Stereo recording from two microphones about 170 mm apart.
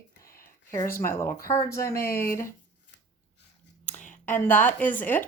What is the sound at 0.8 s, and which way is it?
Speech, 55° left (ahead or behind).